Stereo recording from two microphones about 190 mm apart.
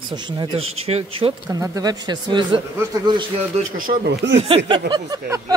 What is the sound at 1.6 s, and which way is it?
Speech, 20° right (ahead or behind).